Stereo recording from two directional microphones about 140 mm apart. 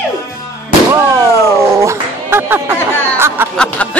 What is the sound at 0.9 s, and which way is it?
Music, 20° right (ahead or behind).